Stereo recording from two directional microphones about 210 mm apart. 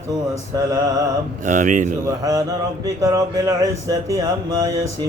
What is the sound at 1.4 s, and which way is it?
Mantra, 40° right (ahead or behind).